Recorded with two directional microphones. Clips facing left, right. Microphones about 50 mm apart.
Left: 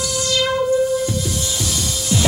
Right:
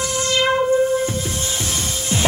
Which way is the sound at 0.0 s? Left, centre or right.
Right.